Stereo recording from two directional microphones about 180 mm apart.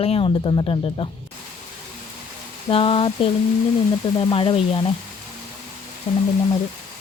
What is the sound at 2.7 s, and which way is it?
A woman's voice, 30° left (ahead or behind).